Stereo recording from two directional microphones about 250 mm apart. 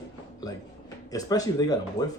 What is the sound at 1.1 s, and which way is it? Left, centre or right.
Speech, centre.